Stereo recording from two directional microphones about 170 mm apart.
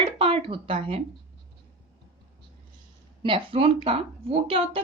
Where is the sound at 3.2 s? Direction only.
30° right (ahead or behind).